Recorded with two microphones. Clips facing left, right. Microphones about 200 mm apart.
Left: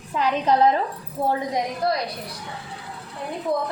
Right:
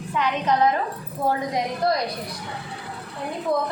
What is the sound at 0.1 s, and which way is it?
A woman's voice, 35° left (ahead or behind).